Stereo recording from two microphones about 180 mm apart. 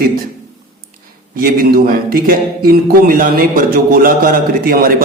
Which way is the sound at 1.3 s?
55° right (ahead or behind).